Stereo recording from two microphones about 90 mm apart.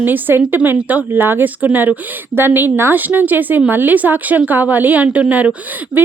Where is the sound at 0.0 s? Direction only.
20° right (ahead or behind).